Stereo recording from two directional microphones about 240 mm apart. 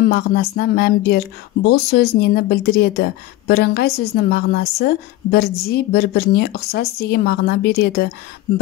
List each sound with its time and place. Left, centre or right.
0.1 s speech: left